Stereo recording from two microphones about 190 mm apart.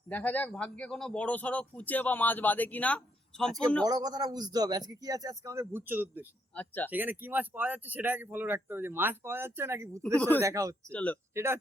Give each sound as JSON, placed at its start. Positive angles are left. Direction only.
{"t": 0.1, "sound": "a man's voice", "side_deg": 10}
{"t": 3.8, "sound": "speech", "side_deg": -20}
{"t": 6.5, "sound": "speech", "side_deg": 10}
{"t": 6.9, "sound": "speech", "side_deg": -10}
{"t": 10.9, "sound": "a man's voice", "side_deg": 10}